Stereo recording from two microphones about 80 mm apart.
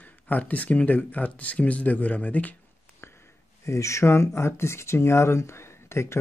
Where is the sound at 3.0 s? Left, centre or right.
Left.